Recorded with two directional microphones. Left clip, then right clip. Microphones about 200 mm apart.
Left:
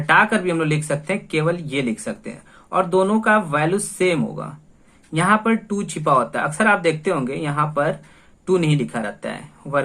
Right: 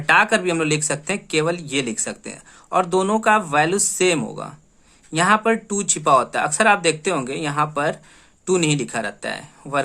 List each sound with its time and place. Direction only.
0.0 s speech: 40° right (ahead or behind)